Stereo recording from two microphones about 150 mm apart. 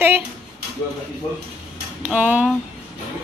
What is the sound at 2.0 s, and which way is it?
Speech, 10° right (ahead or behind).